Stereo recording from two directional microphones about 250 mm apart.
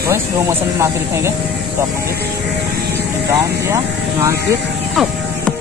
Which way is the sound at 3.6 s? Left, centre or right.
Centre.